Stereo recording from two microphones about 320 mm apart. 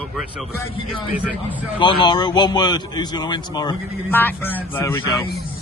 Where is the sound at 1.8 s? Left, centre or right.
Centre.